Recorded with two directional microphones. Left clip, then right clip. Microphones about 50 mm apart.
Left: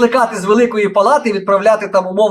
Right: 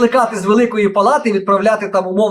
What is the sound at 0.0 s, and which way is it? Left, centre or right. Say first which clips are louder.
Speech: left 1 dB; left.